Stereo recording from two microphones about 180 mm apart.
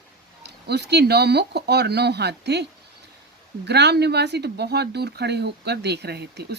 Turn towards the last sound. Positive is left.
turn(degrees=-65)  # may be behind; listen again after turning